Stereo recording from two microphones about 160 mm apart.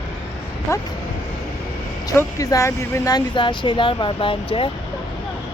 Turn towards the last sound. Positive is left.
turn(degrees=35)  # may be behind; listen again after turning